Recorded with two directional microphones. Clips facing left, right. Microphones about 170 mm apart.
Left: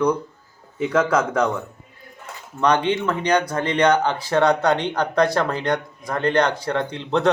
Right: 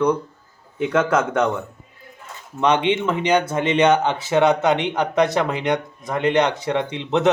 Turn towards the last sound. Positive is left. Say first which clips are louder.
# right 1 dB
turn(degrees=-20)  # may be behind; listen again after turning